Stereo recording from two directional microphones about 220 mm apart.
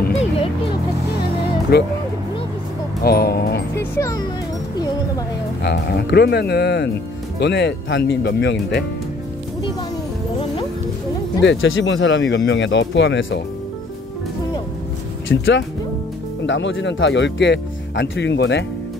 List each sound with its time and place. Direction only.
1.7 s speech: 45° left (ahead or behind)
3.0 s speech: 45° left (ahead or behind)
4.0 s speech: 15° left (ahead or behind)
5.6 s speech: 45° left (ahead or behind)
11.4 s speech: 60° left (ahead or behind)
15.2 s speech: 60° left (ahead or behind)